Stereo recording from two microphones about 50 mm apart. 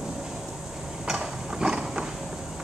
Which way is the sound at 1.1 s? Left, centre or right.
Centre.